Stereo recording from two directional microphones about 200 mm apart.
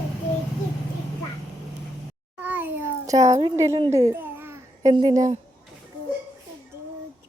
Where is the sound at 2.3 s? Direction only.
10° right (ahead or behind).